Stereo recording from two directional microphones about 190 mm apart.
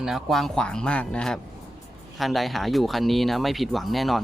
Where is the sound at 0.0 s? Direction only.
Centre (ahead or behind).